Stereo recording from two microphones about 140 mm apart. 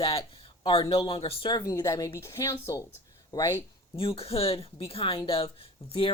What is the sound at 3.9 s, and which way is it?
Speech, 40° left (ahead or behind).